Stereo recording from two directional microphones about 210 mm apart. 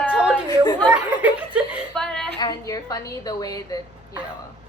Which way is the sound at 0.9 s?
5° right (ahead or behind).